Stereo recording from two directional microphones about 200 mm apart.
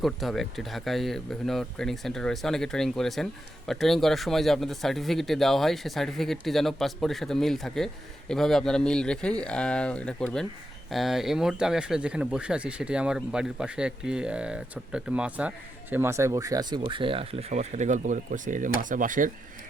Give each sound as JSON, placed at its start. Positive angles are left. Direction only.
{"t": 0.0, "sound": "speech", "side_deg": 0}